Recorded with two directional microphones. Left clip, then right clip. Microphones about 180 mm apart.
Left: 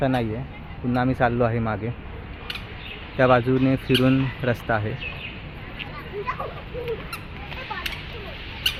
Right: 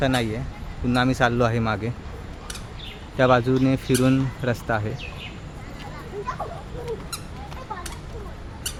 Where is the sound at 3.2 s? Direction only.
5° right (ahead or behind).